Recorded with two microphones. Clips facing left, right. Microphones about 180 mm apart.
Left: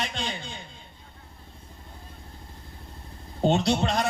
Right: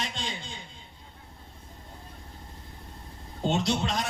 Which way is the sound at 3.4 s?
60° left (ahead or behind).